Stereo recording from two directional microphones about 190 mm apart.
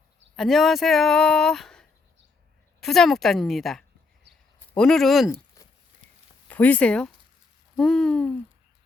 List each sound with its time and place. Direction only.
0.3 s speech: centre (ahead or behind)
5.6 s patter: 15° left (ahead or behind)
6.0 s a sound: 25° left (ahead or behind)
6.5 s speech: 10° left (ahead or behind)